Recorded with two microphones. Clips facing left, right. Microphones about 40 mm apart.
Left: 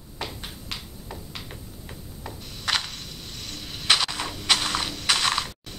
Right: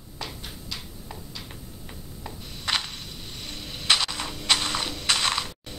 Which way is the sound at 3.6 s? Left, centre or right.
Centre.